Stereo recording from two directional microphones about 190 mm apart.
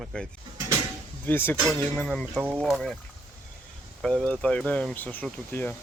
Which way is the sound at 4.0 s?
Centre (ahead or behind).